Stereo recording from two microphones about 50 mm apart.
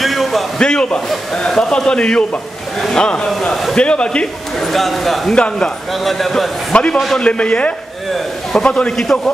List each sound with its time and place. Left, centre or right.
0.0 s a sound: centre
0.6 s a man's voice: centre
4.6 s a man's voice: centre
5.3 s speech: centre
6.0 s a man's voice: centre
6.7 s a man's voice: left